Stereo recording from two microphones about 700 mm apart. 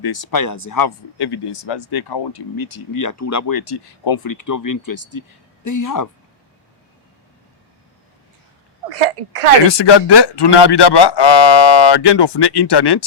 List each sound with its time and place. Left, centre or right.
0.0 s speech: left
9.0 s a woman's voice: right
9.7 s speech: left